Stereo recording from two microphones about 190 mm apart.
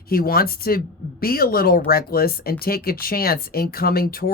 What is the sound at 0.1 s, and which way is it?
Speech, 50° left (ahead or behind).